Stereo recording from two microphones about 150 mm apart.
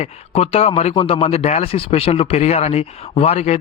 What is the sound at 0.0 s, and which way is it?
A man's voice, 45° left (ahead or behind).